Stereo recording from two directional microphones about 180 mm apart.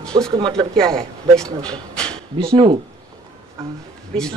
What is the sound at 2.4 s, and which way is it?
Speech, 20° right (ahead or behind).